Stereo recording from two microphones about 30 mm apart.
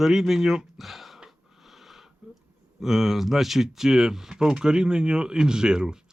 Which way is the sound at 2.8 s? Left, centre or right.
Centre.